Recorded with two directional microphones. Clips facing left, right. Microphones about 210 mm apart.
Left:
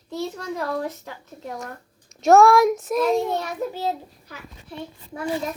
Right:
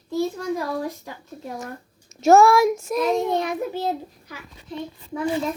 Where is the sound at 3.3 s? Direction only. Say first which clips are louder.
Right 3 dB; 15° right (ahead or behind).